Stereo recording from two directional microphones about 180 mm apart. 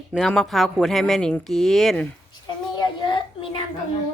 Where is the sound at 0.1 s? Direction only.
5° left (ahead or behind).